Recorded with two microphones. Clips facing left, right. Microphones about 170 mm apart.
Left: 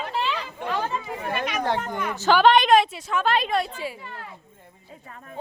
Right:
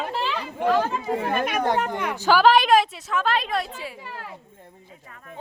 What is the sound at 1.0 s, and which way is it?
Speech, 40° right (ahead or behind).